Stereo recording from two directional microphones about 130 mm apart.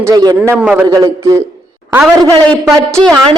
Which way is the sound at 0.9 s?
25° right (ahead or behind).